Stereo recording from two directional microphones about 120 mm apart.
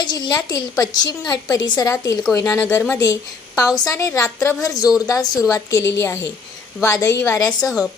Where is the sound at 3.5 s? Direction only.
30° left (ahead or behind).